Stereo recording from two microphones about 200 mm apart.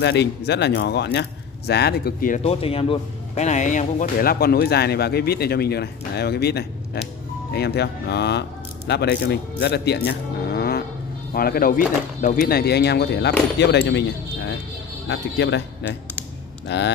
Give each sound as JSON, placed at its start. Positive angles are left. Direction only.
{"t": 0.0, "sound": "speech", "side_deg": 60}
{"t": 15.0, "sound": "speech", "side_deg": 60}